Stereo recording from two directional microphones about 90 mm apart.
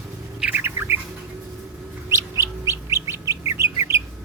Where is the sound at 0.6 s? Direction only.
30° right (ahead or behind).